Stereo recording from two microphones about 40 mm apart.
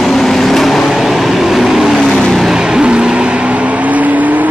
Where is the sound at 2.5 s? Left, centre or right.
Centre.